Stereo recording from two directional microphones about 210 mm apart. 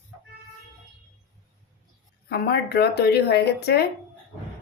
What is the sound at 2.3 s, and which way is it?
Speech, 50° left (ahead or behind).